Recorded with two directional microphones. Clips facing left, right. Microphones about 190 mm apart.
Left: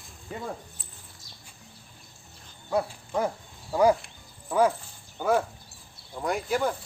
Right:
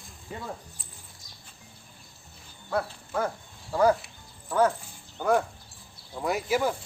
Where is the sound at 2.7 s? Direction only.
15° left (ahead or behind).